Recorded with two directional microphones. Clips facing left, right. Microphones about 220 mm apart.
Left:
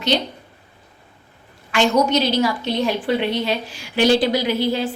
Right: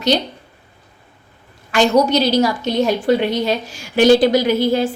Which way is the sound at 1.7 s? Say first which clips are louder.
Right 3 dB; 35° right (ahead or behind).